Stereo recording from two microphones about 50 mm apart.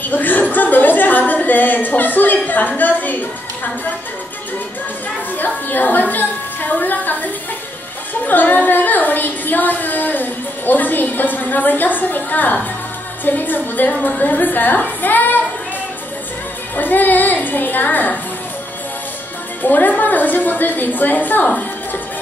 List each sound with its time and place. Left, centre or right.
0.1 s a sound: left
2.8 s a woman's voice: left
5.4 s music: left
8.1 s a sound: left
13.2 s a woman's voice: left
16.7 s a woman's voice: left
19.6 s a woman's voice: left